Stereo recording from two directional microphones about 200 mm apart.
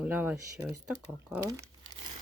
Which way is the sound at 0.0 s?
10° right (ahead or behind).